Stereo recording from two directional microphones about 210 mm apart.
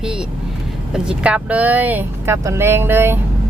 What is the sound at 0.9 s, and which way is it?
Speech, 5° right (ahead or behind).